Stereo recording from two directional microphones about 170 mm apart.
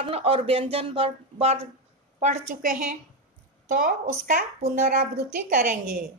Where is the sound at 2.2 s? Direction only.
45° right (ahead or behind).